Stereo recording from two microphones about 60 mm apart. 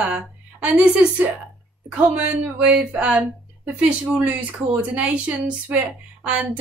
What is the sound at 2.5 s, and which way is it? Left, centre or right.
Speech, centre.